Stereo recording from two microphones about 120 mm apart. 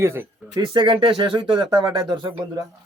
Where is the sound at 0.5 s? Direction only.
35° right (ahead or behind).